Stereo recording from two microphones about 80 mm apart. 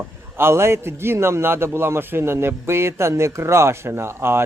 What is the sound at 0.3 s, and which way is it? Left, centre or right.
A man's voice, right.